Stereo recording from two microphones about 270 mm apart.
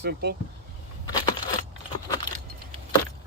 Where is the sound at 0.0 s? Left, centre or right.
Right.